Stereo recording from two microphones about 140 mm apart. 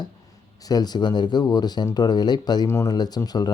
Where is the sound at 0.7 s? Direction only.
30° left (ahead or behind).